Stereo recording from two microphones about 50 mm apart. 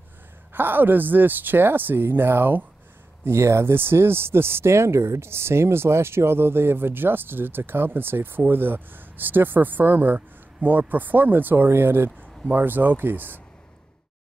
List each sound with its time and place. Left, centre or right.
0.5 s speech: right
3.3 s speech: right